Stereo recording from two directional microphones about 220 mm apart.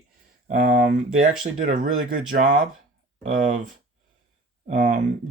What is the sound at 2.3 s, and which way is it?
Speech, 35° right (ahead or behind).